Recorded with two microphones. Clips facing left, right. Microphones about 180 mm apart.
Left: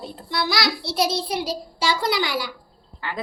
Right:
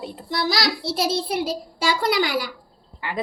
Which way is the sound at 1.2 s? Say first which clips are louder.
Right 2 dB; 50° right (ahead or behind).